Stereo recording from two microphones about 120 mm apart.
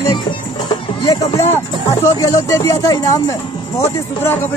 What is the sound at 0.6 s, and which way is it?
Music, 35° left (ahead or behind).